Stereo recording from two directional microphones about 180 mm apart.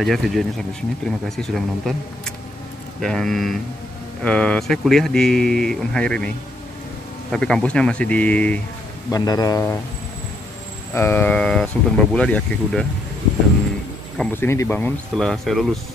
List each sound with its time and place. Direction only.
0.0 s speech: centre (ahead or behind)
9.1 s speech: 20° left (ahead or behind)
11.0 s speech: 10° left (ahead or behind)
14.1 s speech: 5° left (ahead or behind)